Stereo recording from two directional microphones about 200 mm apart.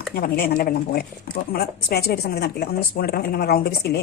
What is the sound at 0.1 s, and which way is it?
A woman's voice, 50° left (ahead or behind).